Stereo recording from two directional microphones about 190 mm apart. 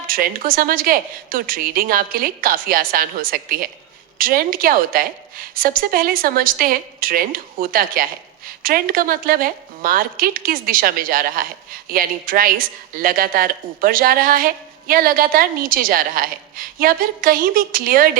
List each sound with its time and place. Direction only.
0.1 s a woman's voice: 50° right (ahead or behind)